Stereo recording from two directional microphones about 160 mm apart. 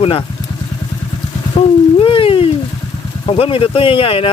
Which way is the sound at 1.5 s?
35° left (ahead or behind).